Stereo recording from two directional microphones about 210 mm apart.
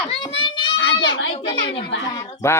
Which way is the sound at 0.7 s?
65° left (ahead or behind).